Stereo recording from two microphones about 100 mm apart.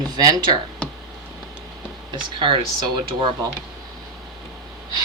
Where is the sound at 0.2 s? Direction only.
40° right (ahead or behind).